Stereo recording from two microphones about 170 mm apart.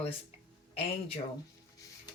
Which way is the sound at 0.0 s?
35° left (ahead or behind).